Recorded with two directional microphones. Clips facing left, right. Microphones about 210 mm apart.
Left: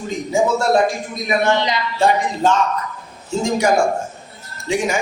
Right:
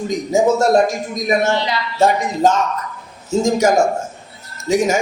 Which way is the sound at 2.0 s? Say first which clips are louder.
Right 3 dB; 40° right (ahead or behind).